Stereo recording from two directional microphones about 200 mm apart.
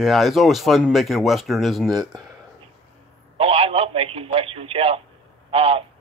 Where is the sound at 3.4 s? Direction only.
30° right (ahead or behind).